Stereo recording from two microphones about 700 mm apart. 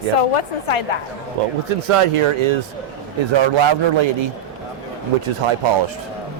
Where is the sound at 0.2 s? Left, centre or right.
Left.